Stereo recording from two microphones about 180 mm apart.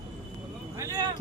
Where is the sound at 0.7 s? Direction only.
15° right (ahead or behind).